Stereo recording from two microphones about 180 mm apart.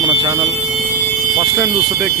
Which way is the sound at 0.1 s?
15° right (ahead or behind).